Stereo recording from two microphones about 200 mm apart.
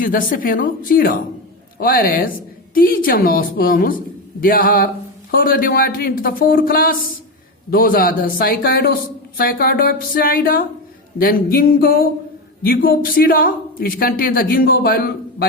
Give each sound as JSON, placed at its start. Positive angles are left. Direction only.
{"t": 0.0, "sound": "speech", "side_deg": 45}